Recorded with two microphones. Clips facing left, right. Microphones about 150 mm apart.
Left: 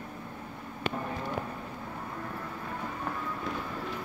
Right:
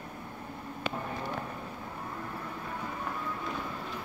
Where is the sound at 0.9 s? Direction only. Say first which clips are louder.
Left 2 dB; 60° left (ahead or behind).